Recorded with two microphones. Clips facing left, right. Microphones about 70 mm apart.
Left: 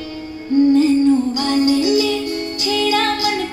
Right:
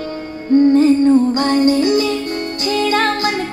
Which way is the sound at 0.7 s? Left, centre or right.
Right.